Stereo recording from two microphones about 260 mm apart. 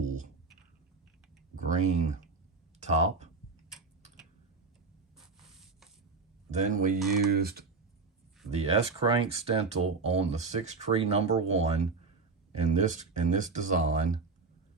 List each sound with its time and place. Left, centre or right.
1.5 s a sound: right
2.8 s speech: right
5.1 s writing: centre
6.5 s speech: right
8.4 s speech: right